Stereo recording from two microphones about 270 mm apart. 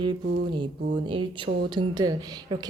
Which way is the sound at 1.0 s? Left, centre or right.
Centre.